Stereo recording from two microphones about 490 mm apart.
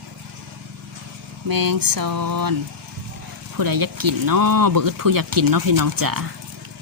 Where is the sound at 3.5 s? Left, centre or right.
Right.